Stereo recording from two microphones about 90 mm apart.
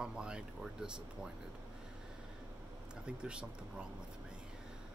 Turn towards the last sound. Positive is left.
turn(degrees=-10)  # may be behind; listen again after turning